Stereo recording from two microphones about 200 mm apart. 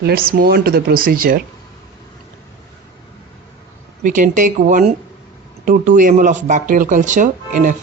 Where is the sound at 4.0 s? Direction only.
40° right (ahead or behind).